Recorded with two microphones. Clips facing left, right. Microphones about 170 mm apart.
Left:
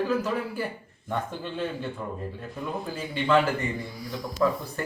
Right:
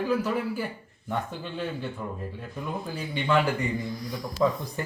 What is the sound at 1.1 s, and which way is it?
Speech, 5° right (ahead or behind).